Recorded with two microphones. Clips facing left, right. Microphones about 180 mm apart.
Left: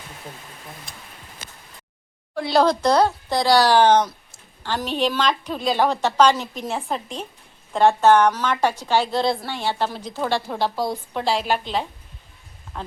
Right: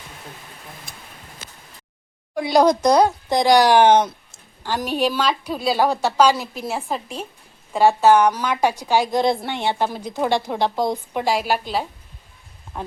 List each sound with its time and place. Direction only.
2.3 s a woman's voice: 15° right (ahead or behind)